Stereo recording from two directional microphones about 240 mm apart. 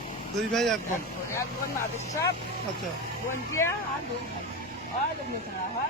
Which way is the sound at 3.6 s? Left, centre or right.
Centre.